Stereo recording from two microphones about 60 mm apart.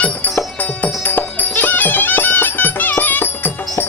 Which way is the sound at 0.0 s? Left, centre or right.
Left.